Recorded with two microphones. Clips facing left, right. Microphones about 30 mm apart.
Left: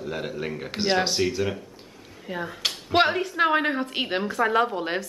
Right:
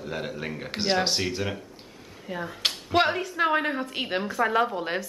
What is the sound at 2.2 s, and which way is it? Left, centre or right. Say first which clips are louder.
A woman's voice: even; centre.